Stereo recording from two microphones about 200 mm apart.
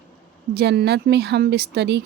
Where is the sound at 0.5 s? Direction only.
55° right (ahead or behind).